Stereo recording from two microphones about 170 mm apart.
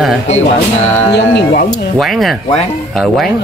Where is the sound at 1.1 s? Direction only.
85° left.